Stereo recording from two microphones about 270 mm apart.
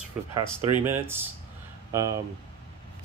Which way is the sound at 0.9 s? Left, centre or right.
Centre.